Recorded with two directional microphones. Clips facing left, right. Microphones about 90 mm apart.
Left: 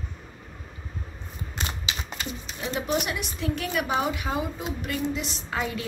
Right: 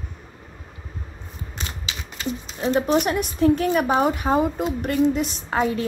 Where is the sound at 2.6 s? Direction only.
40° right (ahead or behind).